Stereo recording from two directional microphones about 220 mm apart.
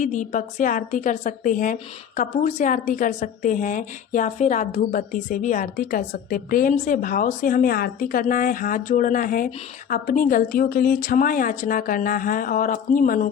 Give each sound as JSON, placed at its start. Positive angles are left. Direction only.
{"t": 0.0, "sound": "a woman's voice", "side_deg": 35}